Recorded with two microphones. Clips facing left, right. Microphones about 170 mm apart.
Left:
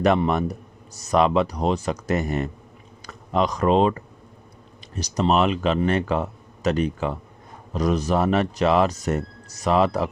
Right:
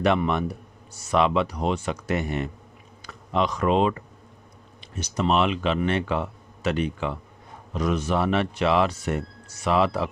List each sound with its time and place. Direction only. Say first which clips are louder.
0.0 s speech: left 3 dB; 40° left (ahead or behind)